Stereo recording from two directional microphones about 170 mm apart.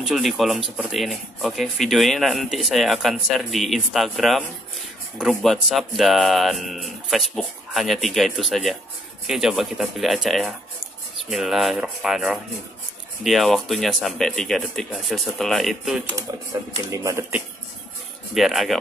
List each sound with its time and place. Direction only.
0.0 s speech: centre (ahead or behind)
16.3 s speech: 20° right (ahead or behind)
18.3 s speech: centre (ahead or behind)